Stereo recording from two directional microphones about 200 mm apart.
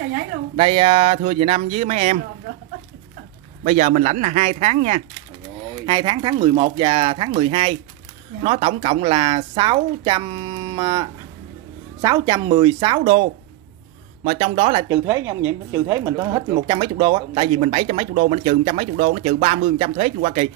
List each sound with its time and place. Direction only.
0.6 s speech: 25° right (ahead or behind)
3.6 s speech: 35° right (ahead or behind)
5.9 s speech: 20° right (ahead or behind)
14.9 s speech: 15° right (ahead or behind); by 20.4 s 30° right (ahead or behind)